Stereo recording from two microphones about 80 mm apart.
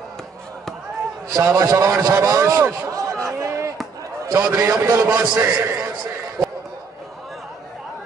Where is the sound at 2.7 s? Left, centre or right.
Right.